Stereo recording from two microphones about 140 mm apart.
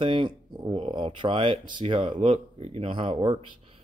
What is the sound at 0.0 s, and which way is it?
Speech, 35° right (ahead or behind).